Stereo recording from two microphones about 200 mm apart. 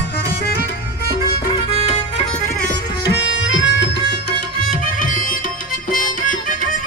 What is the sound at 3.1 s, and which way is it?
Music, 65° left (ahead or behind).